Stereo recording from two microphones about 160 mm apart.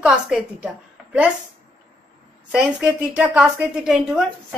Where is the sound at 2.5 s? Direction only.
5° right (ahead or behind).